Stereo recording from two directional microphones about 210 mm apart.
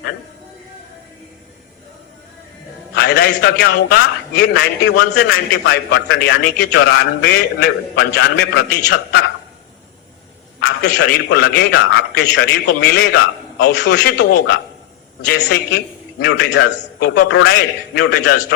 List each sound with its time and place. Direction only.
2.9 s a man's voice: 45° left (ahead or behind)
10.6 s a man's voice: 50° left (ahead or behind)